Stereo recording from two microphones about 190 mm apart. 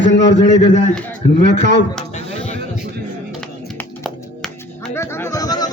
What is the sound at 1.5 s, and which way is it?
Speech, 65° left (ahead or behind).